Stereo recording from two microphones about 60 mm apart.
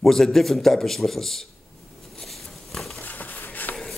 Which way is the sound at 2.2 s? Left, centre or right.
Centre.